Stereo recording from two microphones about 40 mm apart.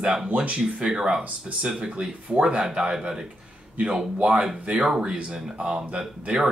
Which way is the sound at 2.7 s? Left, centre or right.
Centre.